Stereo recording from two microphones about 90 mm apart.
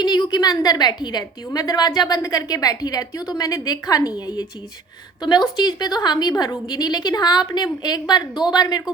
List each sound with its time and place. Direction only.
0.0 s a woman's voice: 50° left (ahead or behind)
5.5 s a woman's voice: 50° left (ahead or behind)